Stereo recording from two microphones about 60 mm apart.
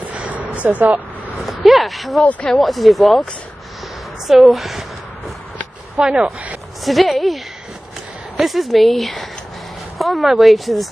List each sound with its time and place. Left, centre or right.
0.1 s a sound: right
1.4 s a sound: centre
2.5 s speech: centre
4.3 s speech: centre
5.9 s speech: centre
8.4 s speech: centre